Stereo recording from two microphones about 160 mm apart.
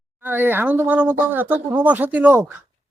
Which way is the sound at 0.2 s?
10° right (ahead or behind).